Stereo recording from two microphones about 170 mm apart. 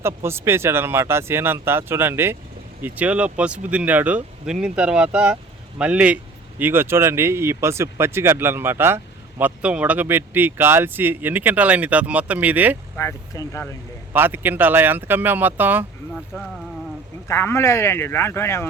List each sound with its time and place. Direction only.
0.0 s speech: 15° right (ahead or behind)
13.0 s speech: 20° left (ahead or behind)
14.1 s speech: 10° right (ahead or behind)
17.2 s speech: 15° left (ahead or behind)